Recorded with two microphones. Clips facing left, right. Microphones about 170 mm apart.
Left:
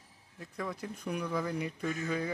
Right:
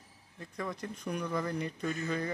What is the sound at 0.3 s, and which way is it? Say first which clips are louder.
Speech: even; 5° left (ahead or behind).